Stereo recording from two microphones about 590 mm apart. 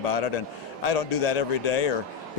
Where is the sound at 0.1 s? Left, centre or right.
Left.